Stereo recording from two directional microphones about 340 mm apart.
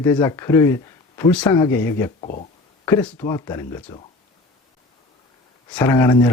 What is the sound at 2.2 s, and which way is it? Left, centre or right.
Speech, left.